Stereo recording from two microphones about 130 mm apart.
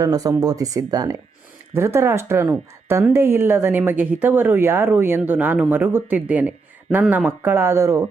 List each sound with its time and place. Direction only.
0.0 s a woman's voice: 30° right (ahead or behind)